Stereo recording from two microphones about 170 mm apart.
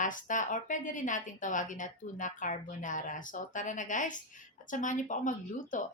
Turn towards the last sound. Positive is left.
turn(degrees=50)  # may be behind; listen again after turning